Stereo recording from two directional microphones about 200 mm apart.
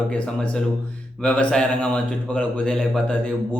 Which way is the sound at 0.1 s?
5° left (ahead or behind).